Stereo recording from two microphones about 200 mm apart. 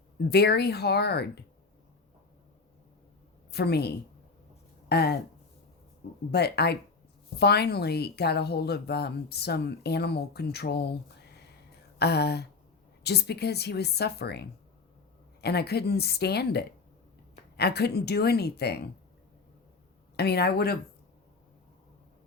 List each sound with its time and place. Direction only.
0.3 s a woman's voice: 55° left (ahead or behind)
3.5 s a woman's voice: 55° left (ahead or behind)
6.3 s a woman's voice: 55° left (ahead or behind)
11.9 s a woman's voice: 55° left (ahead or behind)
20.1 s speech: 55° left (ahead or behind)